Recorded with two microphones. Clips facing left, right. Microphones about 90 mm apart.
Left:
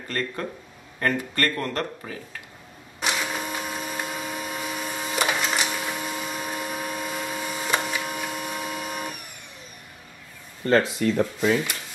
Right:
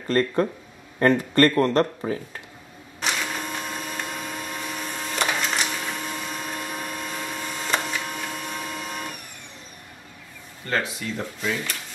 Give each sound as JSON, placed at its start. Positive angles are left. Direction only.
{"t": 0.9, "sound": "a man's voice", "side_deg": -30}
{"t": 3.0, "sound": "printer", "side_deg": 5}
{"t": 10.7, "sound": "speech", "side_deg": 35}